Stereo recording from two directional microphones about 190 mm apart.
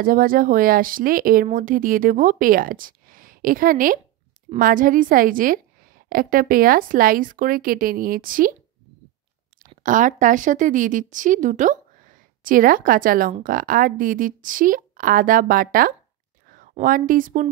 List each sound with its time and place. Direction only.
0.0 s speech: 45° right (ahead or behind)
9.8 s speech: 40° right (ahead or behind)